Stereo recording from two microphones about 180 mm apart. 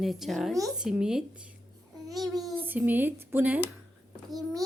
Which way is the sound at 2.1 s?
Centre (ahead or behind).